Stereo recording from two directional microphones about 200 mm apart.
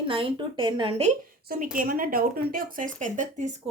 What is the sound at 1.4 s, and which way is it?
Speech, 45° right (ahead or behind).